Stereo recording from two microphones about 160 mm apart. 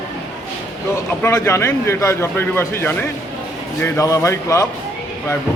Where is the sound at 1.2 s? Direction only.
15° left (ahead or behind).